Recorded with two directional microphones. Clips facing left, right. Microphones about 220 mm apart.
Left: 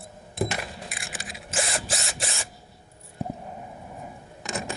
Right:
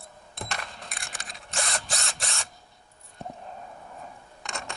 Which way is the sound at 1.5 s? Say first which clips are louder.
Left 4 dB; centre (ahead or behind).